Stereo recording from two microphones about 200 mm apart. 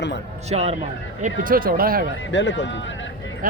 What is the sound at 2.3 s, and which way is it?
Speech, 65° left (ahead or behind).